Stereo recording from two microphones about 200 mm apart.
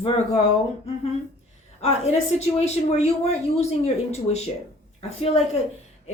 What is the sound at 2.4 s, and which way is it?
Speech, 30° left (ahead or behind).